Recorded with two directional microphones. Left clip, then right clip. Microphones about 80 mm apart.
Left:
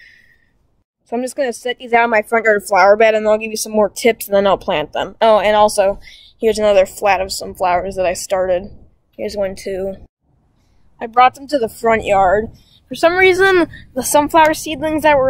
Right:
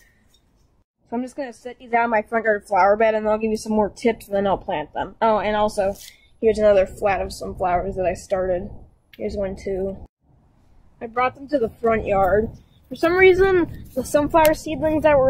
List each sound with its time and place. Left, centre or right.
1.0 s speech: left
11.0 s speech: left